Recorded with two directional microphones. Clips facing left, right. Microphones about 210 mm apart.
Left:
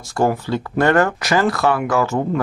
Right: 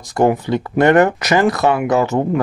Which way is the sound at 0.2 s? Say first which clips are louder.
Right 4 dB; 20° right (ahead or behind).